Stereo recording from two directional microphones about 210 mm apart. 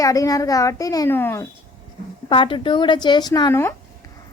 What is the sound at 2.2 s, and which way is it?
A woman's voice, 25° left (ahead or behind).